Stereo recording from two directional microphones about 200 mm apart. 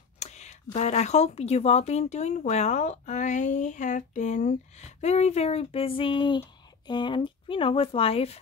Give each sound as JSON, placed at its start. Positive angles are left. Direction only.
{"t": 0.2, "sound": "speech", "side_deg": 35}